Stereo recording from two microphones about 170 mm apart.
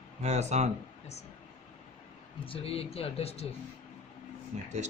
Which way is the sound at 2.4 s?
35° left (ahead or behind).